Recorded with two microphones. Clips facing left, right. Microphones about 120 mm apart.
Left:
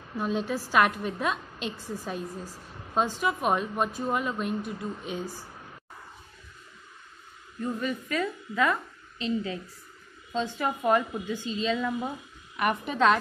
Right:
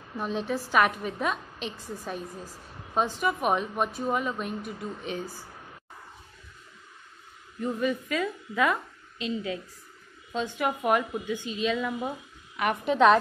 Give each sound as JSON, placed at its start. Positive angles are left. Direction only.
{"t": 0.1, "sound": "a woman's voice", "side_deg": 0}
{"t": 7.6, "sound": "a woman's voice", "side_deg": -15}
{"t": 12.9, "sound": "a woman's voice", "side_deg": -20}